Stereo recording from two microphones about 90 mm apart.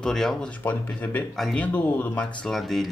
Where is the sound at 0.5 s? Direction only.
20° left (ahead or behind).